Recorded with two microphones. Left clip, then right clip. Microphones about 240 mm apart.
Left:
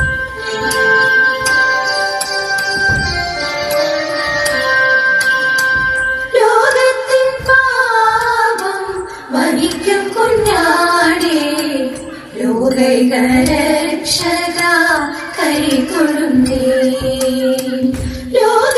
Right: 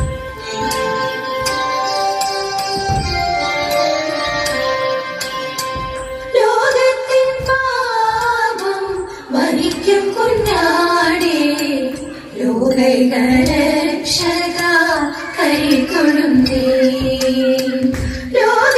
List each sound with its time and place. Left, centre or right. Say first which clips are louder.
0.8 s music: left 9 dB; left
3.7 s music: left 4 dB; left
9.3 s child singing: left 2 dB; left
12.6 s music: left 1 dB; left
15.4 s music: even; left
18.3 s music: left 1 dB; left